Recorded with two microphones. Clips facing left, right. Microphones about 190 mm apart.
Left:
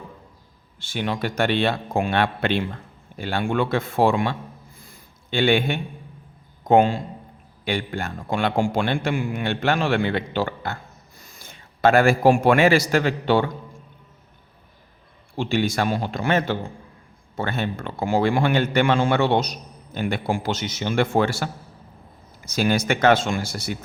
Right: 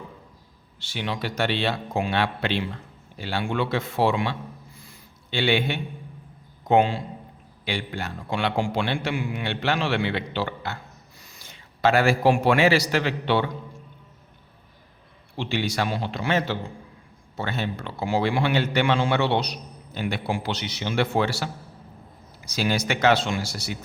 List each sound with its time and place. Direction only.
0.8 s a man's voice: 50° left (ahead or behind)
4.8 s a sound: 50° left (ahead or behind)
6.7 s a man's voice: 45° left (ahead or behind)
15.4 s a man's voice: 45° left (ahead or behind)